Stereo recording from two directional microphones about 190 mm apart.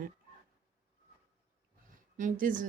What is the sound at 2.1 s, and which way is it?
Speech, 45° right (ahead or behind).